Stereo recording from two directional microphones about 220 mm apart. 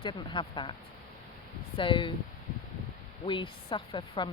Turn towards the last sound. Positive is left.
turn(degrees=20)  # may be behind; listen again after turning